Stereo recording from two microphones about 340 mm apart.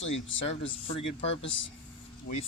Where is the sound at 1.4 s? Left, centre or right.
Left.